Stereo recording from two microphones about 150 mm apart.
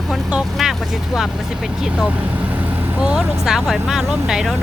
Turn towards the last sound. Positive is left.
turn(degrees=-5)  # may be behind; listen again after turning